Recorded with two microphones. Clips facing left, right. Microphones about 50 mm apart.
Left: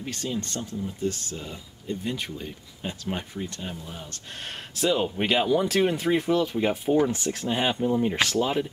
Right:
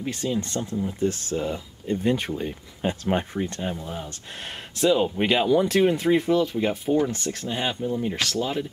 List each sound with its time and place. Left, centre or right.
0.0 s speech: centre
0.7 s speech: right
2.8 s speech: right
3.9 s speech: centre
4.7 s speech: centre